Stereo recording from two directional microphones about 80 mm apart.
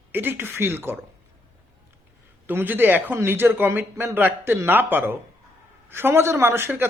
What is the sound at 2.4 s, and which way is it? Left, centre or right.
Speech, right.